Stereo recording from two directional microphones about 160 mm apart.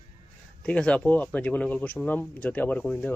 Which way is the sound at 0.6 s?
5° left (ahead or behind).